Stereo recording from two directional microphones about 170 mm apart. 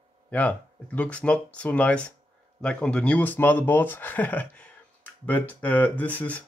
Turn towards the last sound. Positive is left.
turn(degrees=10)  # may be behind; listen again after turning